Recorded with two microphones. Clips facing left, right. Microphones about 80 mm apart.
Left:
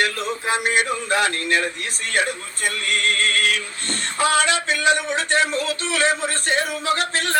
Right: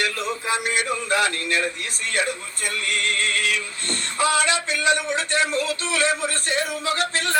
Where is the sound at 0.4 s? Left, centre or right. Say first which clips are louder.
Left 4 dB; left.